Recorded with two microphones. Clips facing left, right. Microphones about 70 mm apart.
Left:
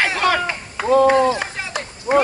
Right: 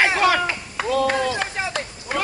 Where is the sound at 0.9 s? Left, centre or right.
Left.